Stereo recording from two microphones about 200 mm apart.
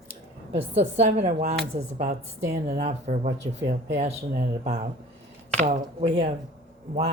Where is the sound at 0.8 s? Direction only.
30° right (ahead or behind).